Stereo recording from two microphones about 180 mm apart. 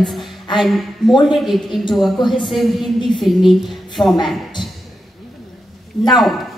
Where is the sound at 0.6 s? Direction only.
Centre (ahead or behind).